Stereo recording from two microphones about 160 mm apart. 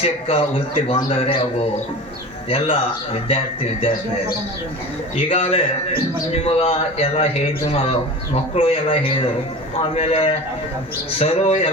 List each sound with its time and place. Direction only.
0.0 s a man's voice: 35° left (ahead or behind)
5.1 s a man's voice: 40° left (ahead or behind)